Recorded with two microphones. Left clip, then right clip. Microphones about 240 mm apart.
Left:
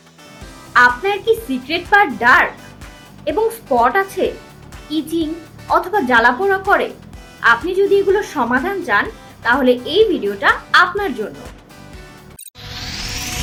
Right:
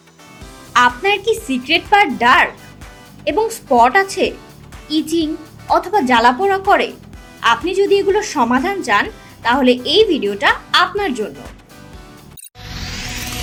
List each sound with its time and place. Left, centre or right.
0.7 s a woman's voice: right